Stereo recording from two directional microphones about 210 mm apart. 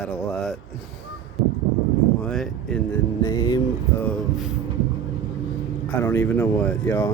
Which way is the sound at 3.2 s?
20° left (ahead or behind).